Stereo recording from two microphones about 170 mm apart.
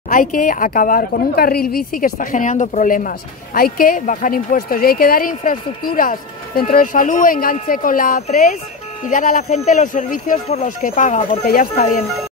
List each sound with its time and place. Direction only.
0.1 s speech: 55° left (ahead or behind)